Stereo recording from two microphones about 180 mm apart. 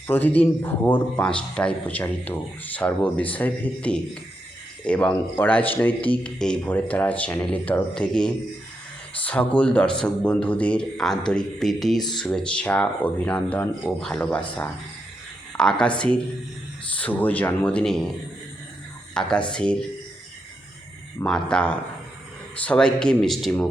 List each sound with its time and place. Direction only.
0.1 s a man's voice: 10° left (ahead or behind)
19.1 s speech: 5° left (ahead or behind)
21.2 s speech: 5° left (ahead or behind)